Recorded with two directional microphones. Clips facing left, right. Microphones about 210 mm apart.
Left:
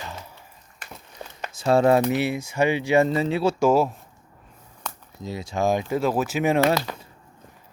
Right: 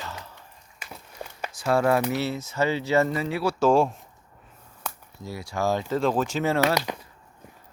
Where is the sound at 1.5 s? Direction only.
25° left (ahead or behind).